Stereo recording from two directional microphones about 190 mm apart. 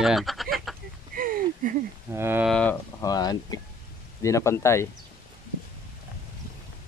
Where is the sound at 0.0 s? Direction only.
Centre (ahead or behind).